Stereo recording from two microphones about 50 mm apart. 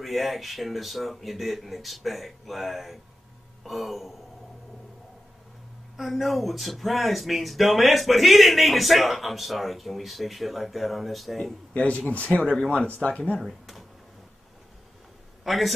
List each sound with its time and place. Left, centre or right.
0.0 s speech: centre
5.9 s speech: centre
11.7 s speech: left
12.5 s speech: centre
13.4 s a sound: centre
15.4 s a man's voice: centre